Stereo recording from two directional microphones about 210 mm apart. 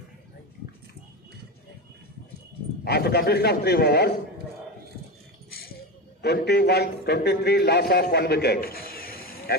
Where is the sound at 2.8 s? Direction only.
50° left (ahead or behind).